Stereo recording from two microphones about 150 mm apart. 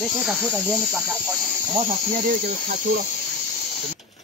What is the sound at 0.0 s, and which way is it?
Speech, centre (ahead or behind).